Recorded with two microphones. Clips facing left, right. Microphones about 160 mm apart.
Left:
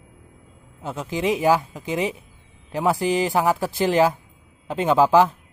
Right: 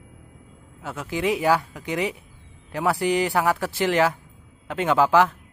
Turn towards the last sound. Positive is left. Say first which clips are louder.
# left 2 dB
turn(degrees=15)  # may be behind; listen again after turning